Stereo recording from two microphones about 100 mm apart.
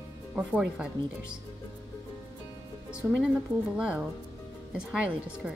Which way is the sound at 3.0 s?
15° right (ahead or behind).